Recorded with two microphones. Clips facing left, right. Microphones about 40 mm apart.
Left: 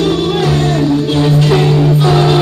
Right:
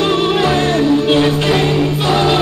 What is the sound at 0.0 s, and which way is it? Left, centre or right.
Music, right.